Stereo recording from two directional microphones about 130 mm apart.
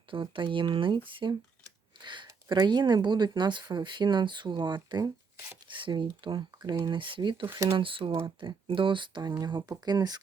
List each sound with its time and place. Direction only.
0.1 s speech: 40° right (ahead or behind)